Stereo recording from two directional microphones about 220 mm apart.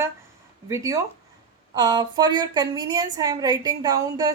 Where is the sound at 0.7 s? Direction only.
15° right (ahead or behind).